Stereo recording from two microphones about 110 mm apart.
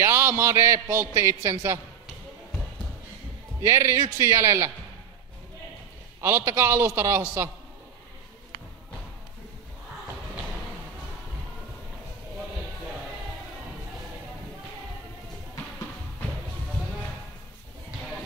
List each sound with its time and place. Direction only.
0.0 s a man's voice: 25° right (ahead or behind)
3.6 s a man's voice: 25° right (ahead or behind)
6.2 s a man's voice: 25° right (ahead or behind)